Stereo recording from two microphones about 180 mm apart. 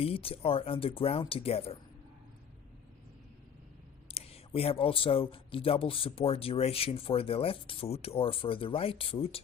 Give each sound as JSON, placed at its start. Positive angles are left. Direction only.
{"t": 0.0, "sound": "speech", "side_deg": 30}
{"t": 4.1, "sound": "speech", "side_deg": 35}